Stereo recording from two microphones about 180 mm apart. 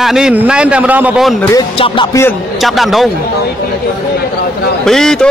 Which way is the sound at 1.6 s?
30° left (ahead or behind).